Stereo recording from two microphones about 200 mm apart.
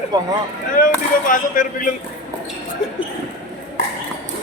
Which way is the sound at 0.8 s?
40° left (ahead or behind).